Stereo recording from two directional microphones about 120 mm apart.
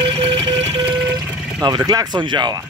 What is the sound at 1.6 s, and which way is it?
Speech, 30° right (ahead or behind).